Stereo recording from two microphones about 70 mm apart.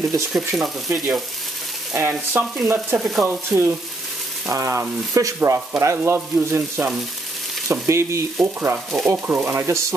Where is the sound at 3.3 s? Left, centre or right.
Right.